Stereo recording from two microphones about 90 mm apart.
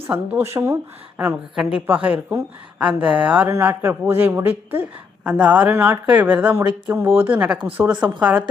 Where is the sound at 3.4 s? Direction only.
25° right (ahead or behind).